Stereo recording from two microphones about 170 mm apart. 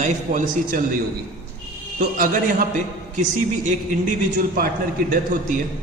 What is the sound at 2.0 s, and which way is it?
A man's voice, 55° right (ahead or behind).